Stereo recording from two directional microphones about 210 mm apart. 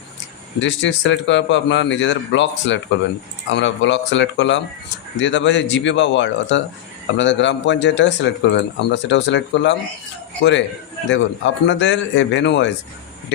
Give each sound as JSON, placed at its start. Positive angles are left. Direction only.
{"t": 0.6, "sound": "speech", "side_deg": 60}
{"t": 11.1, "sound": "speech", "side_deg": 60}